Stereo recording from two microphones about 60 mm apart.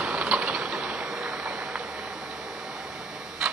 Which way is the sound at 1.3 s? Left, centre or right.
Right.